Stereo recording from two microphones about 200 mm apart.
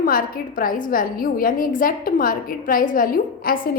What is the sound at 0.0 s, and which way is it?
A woman's voice, 45° left (ahead or behind).